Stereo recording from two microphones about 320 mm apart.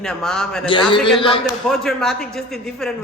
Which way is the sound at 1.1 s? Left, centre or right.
Centre.